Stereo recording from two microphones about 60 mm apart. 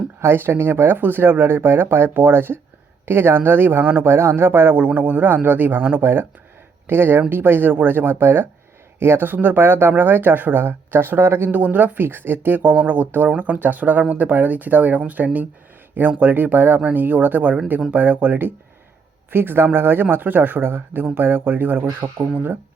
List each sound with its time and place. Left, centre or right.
0.2 s speech: right